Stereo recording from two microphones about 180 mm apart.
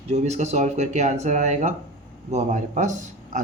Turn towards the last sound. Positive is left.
turn(degrees=-45)  # may be behind; listen again after turning